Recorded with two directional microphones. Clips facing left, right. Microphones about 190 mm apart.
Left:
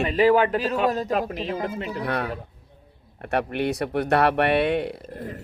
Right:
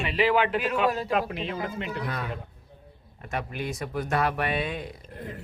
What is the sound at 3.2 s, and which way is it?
Speech, 65° left (ahead or behind).